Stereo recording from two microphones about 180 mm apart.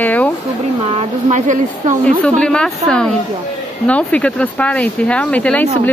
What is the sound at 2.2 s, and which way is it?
A woman's voice, 5° left (ahead or behind).